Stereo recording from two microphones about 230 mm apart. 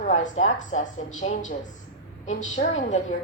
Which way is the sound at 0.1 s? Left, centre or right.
Left.